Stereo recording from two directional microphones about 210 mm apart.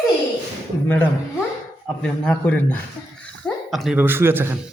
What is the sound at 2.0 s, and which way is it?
A man's voice, 5° left (ahead or behind).